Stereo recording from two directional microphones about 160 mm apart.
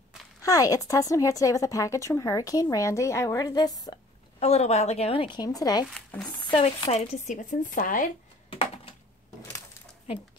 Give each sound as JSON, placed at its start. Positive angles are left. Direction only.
{"t": 0.4, "sound": "a woman's voice", "side_deg": 20}
{"t": 4.4, "sound": "speech", "side_deg": 40}
{"t": 5.9, "sound": "speech", "side_deg": 0}
{"t": 6.2, "sound": "speech", "side_deg": 35}
{"t": 6.9, "sound": "speech", "side_deg": 45}
{"t": 8.5, "sound": "a sound", "side_deg": 35}